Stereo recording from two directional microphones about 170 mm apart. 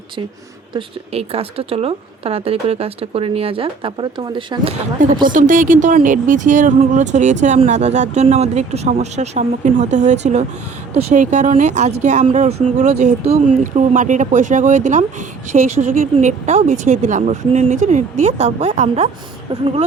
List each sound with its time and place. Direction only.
0.7 s speech: 35° right (ahead or behind)
5.3 s speech: 50° right (ahead or behind)